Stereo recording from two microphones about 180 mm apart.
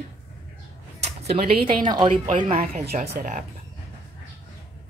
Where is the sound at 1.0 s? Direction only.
35° right (ahead or behind).